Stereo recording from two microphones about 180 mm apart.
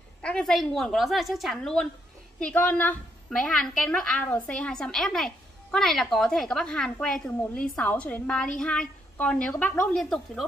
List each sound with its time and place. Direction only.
0.2 s a woman's voice: 5° left (ahead or behind)